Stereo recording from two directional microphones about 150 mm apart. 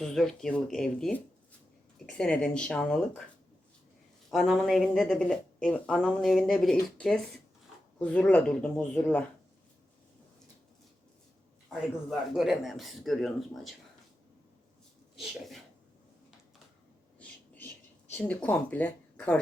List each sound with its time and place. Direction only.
0.0 s speech: 5° left (ahead or behind)
4.3 s speech: centre (ahead or behind)
11.7 s speech: centre (ahead or behind)
15.2 s speech: centre (ahead or behind)
17.2 s a sound: 10° left (ahead or behind)
18.1 s speech: 10° left (ahead or behind)